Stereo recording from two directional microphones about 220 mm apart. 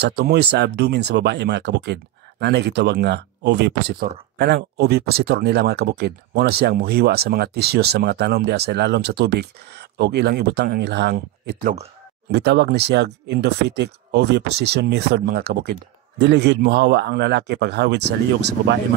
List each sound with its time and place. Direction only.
0.0 s speech: 50° right (ahead or behind)
12.3 s speech: 50° right (ahead or behind)